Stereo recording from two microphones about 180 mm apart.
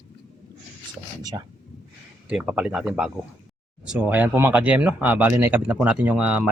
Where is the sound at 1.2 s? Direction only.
20° right (ahead or behind).